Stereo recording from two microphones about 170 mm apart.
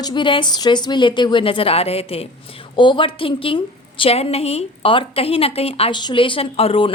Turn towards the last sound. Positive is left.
turn(degrees=35)  # may be behind; listen again after turning